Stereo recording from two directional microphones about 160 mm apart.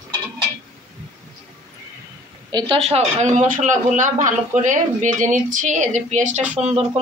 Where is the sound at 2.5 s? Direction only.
35° right (ahead or behind).